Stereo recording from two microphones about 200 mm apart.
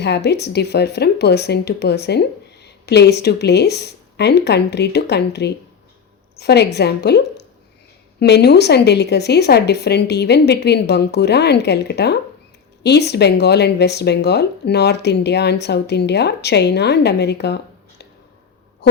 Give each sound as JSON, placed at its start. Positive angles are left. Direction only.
{"t": 0.0, "sound": "speech", "side_deg": 60}